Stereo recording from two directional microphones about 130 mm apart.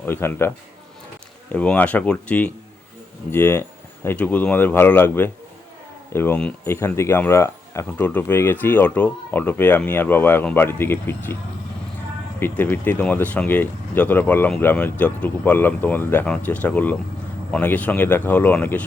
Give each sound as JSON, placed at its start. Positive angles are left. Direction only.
{"t": 0.0, "sound": "speech", "side_deg": 15}
{"t": 1.5, "sound": "speech", "side_deg": 10}
{"t": 12.4, "sound": "speech", "side_deg": 15}